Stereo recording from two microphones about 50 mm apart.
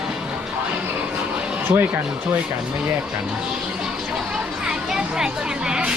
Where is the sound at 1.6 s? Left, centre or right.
Right.